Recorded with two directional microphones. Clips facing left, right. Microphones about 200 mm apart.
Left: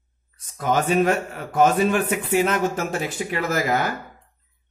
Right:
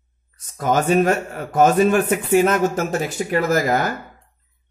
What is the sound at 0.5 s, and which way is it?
A man's voice, 45° right (ahead or behind).